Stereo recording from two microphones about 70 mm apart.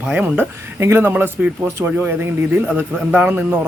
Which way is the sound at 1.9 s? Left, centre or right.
Right.